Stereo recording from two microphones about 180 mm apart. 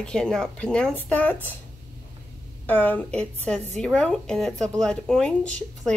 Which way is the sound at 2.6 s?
10° left (ahead or behind).